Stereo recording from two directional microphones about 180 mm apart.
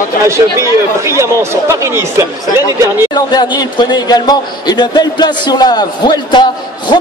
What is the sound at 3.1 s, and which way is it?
A man's voice, 20° left (ahead or behind).